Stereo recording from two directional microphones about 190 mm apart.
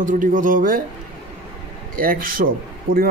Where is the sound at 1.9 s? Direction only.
50° right (ahead or behind).